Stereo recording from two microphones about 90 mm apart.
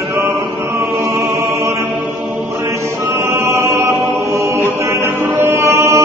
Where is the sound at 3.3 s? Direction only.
30° right (ahead or behind).